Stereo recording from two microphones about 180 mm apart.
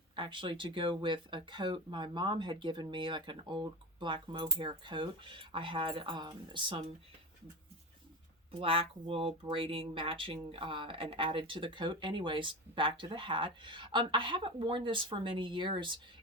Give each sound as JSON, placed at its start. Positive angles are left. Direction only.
{"t": 0.2, "sound": "speech", "side_deg": -25}
{"t": 8.5, "sound": "speech", "side_deg": -30}